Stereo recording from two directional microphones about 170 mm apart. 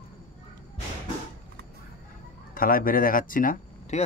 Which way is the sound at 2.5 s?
55° left (ahead or behind).